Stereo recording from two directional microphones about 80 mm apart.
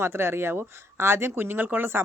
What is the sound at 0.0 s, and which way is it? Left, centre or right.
Speech, right.